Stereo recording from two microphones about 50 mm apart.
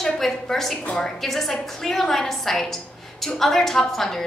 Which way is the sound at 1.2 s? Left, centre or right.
Centre.